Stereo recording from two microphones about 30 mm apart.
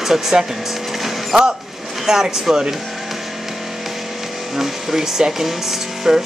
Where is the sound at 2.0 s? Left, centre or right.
Centre.